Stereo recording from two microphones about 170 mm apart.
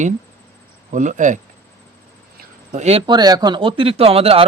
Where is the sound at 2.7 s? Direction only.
40° right (ahead or behind).